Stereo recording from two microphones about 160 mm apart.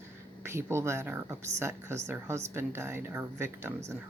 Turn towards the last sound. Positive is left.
turn(degrees=-15)  # may be behind; listen again after turning